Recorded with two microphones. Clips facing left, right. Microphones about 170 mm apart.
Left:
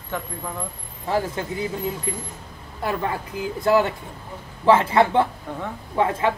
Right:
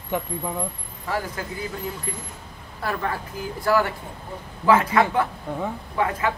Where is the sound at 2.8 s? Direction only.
20° left (ahead or behind).